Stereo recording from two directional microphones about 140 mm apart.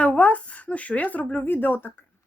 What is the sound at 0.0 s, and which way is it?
Speech, 10° left (ahead or behind).